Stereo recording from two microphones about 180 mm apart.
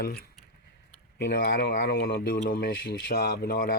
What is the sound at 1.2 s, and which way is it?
Speech, 70° left (ahead or behind).